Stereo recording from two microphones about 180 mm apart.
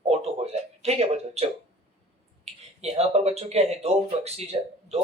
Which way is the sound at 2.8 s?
35° right (ahead or behind).